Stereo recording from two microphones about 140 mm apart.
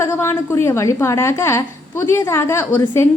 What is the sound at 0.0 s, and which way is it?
A woman's voice, 20° left (ahead or behind).